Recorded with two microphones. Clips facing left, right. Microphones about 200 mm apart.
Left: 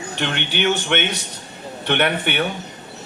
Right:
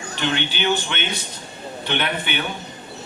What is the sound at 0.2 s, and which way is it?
A man's voice, 60° left (ahead or behind).